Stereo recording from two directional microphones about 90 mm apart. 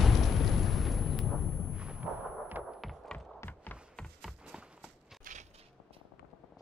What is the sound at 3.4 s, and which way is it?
Music, 20° left (ahead or behind).